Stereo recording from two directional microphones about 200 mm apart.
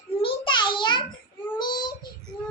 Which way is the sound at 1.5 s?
20° left (ahead or behind).